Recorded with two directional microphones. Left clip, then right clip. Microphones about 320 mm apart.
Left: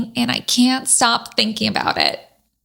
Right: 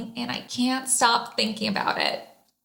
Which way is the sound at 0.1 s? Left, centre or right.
Left.